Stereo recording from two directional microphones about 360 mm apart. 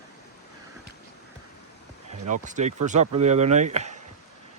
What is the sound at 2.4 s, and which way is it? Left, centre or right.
Speech, centre.